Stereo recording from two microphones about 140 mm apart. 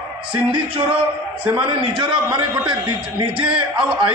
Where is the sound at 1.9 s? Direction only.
35° right (ahead or behind).